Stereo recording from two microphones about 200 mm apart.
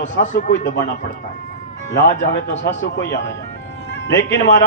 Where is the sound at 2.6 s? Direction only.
60° left (ahead or behind).